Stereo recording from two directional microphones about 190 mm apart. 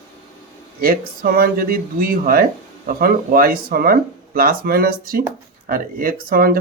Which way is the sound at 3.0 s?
50° right (ahead or behind).